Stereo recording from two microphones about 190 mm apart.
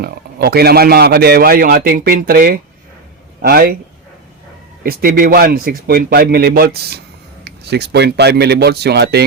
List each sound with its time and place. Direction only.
0.0 s speech: 55° right (ahead or behind)
4.8 s speech: 50° right (ahead or behind)